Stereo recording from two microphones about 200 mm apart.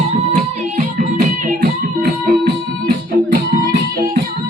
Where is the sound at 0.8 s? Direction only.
40° right (ahead or behind).